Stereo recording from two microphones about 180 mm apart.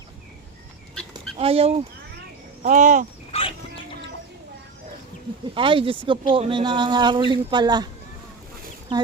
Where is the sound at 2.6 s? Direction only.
45° right (ahead or behind).